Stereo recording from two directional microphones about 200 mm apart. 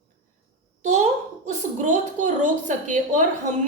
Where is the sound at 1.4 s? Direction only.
40° right (ahead or behind).